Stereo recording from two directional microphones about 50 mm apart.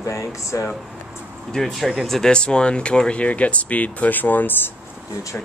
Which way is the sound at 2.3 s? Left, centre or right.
Centre.